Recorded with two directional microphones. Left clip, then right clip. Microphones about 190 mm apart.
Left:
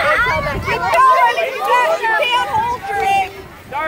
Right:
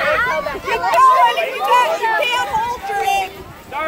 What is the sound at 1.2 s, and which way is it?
Chatter, 55° right (ahead or behind).